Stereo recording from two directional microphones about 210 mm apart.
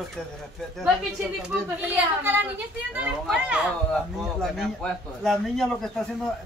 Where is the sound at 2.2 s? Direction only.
10° right (ahead or behind).